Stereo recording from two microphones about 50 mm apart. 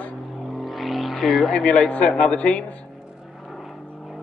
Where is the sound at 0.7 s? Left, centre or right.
Centre.